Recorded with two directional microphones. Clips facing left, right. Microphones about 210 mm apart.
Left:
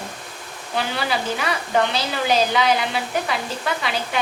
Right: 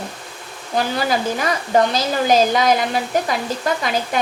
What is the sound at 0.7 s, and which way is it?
A woman's voice, 40° right (ahead or behind).